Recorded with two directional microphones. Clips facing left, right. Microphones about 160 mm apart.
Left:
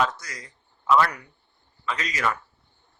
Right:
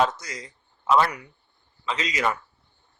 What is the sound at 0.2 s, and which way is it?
A man's voice, 20° right (ahead or behind).